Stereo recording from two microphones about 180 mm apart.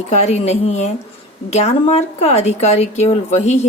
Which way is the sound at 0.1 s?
40° left (ahead or behind).